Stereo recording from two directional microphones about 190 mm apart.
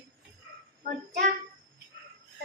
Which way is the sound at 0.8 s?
45° right (ahead or behind).